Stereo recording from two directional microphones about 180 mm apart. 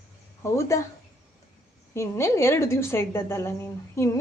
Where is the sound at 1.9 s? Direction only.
15° left (ahead or behind).